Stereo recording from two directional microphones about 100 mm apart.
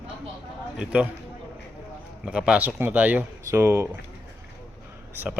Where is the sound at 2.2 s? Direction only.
10° right (ahead or behind); by 3.8 s 25° right (ahead or behind).